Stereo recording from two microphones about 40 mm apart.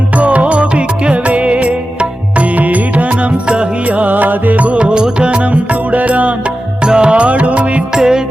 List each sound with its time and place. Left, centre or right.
0.2 s music: right
3.9 s music: right
5.9 s music: right
6.8 s music: right
7.9 s music: centre